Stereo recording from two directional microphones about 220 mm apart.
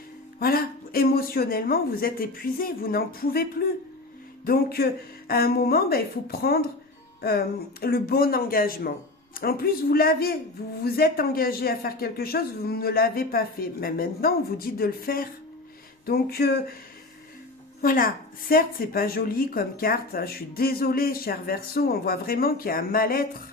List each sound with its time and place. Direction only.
0.3 s speech: 40° left (ahead or behind)
17.8 s a woman's voice: 40° left (ahead or behind)